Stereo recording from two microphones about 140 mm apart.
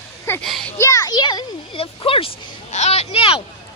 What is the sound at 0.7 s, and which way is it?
A child's voice, 20° left (ahead or behind).